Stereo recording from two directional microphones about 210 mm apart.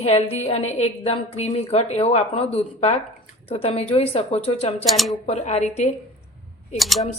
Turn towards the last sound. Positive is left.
turn(degrees=0)  # may be behind; listen again after turning